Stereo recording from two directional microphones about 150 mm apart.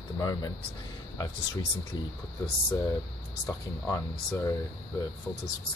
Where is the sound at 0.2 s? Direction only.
30° left (ahead or behind).